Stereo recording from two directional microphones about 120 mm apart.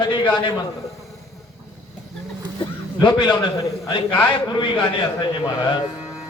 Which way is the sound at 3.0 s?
35° left (ahead or behind).